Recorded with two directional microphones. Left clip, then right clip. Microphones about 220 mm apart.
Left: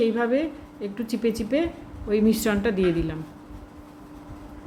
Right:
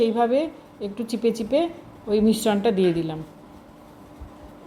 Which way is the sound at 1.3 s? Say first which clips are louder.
Right 3 dB; 25° left (ahead or behind).